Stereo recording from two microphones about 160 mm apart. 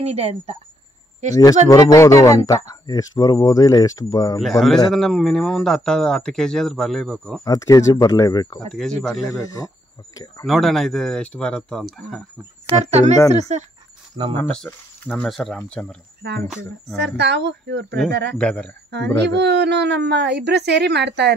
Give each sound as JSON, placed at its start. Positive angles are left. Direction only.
{"t": 0.0, "sound": "speech", "side_deg": -40}
{"t": 1.3, "sound": "speech", "side_deg": 25}
{"t": 4.4, "sound": "a man's voice", "side_deg": 0}
{"t": 7.4, "sound": "speech", "side_deg": 20}
{"t": 8.7, "sound": "a man's voice", "side_deg": 0}
{"t": 9.3, "sound": "speech", "side_deg": 20}
{"t": 10.4, "sound": "a man's voice", "side_deg": 0}
{"t": 12.7, "sound": "speech", "side_deg": -45}
{"t": 14.2, "sound": "speech", "side_deg": -30}
{"t": 15.0, "sound": "a man's voice", "side_deg": 0}
{"t": 16.2, "sound": "speech", "side_deg": -90}
{"t": 18.4, "sound": "speech", "side_deg": 5}
{"t": 19.3, "sound": "speech", "side_deg": -90}